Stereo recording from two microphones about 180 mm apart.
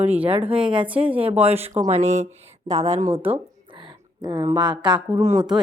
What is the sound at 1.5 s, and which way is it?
Speech, 35° right (ahead or behind).